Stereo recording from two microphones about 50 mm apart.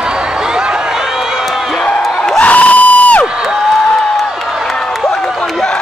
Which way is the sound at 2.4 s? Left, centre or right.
Left.